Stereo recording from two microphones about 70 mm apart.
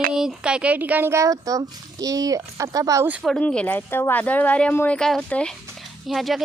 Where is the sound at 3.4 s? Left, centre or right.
Centre.